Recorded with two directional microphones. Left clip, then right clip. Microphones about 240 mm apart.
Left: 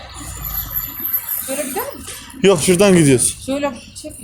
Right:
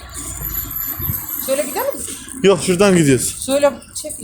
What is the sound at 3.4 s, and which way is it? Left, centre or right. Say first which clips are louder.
Speech: right 10 dB; right.